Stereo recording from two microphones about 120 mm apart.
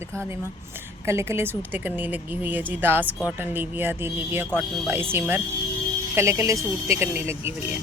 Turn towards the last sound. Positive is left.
turn(degrees=-20)  # may be behind; listen again after turning